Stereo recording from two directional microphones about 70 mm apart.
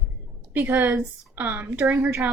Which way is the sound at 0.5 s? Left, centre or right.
Right.